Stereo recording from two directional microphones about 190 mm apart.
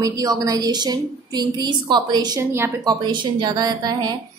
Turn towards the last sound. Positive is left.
turn(degrees=-20)  # may be behind; listen again after turning